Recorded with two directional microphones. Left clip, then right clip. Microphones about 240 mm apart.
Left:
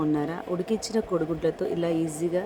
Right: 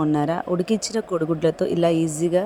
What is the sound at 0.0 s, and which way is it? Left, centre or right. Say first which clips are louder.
Speech: right 6 dB; right.